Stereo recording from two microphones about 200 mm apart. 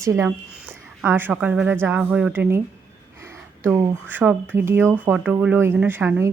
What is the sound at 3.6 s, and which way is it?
Speech, 10° right (ahead or behind).